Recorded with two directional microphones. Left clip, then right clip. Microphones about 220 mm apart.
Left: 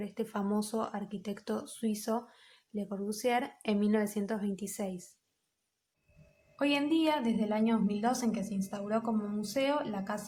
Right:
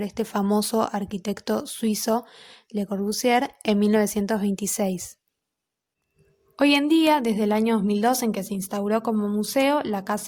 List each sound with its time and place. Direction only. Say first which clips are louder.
0.0 s speech: right 10 dB; 40° right (ahead or behind)
6.6 s a woman's voice: right 10 dB; 45° right (ahead or behind)